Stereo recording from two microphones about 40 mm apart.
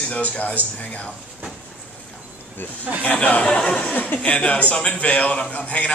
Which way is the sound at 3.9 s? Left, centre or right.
Left.